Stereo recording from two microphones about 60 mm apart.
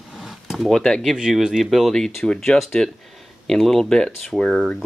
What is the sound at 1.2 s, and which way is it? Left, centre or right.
Speech, centre.